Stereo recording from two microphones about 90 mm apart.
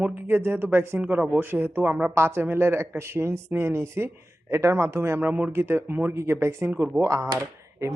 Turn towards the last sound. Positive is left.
turn(degrees=-35)  # may be behind; listen again after turning